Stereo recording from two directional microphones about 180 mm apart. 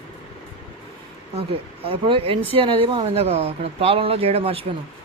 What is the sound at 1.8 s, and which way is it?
Speech, 30° right (ahead or behind).